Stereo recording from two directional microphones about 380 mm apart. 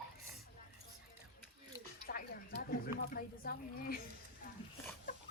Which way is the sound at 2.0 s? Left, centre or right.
Left.